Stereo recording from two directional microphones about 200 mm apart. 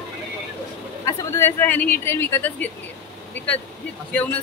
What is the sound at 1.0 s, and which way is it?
Speech, 10° left (ahead or behind).